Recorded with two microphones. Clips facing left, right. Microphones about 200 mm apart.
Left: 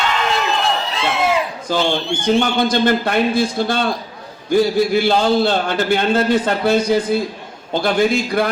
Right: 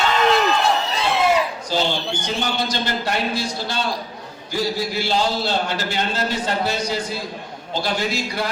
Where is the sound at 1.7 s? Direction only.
50° left (ahead or behind).